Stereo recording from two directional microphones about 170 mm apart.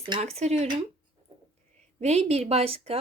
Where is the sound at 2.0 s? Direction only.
40° right (ahead or behind).